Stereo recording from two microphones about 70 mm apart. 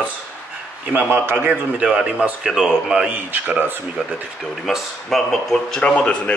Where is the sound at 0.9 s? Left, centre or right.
Right.